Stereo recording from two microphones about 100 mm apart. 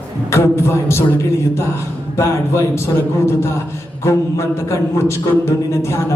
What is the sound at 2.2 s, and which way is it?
A man's voice, 25° left (ahead or behind).